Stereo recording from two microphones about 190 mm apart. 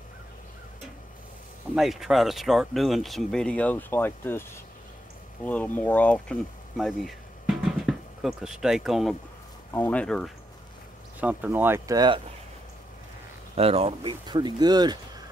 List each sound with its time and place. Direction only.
1.8 s speech: centre (ahead or behind)
6.8 s a sound: centre (ahead or behind)
9.7 s speech: 10° left (ahead or behind)
11.1 s speech: 10° right (ahead or behind)
13.6 s speech: 30° right (ahead or behind)